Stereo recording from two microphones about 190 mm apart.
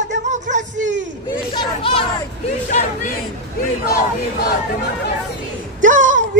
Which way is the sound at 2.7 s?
40° left (ahead or behind).